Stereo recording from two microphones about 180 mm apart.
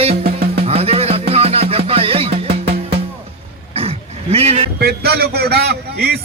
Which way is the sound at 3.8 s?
35° right (ahead or behind).